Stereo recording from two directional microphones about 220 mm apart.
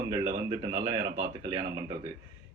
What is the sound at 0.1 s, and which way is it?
A man's voice, 20° right (ahead or behind).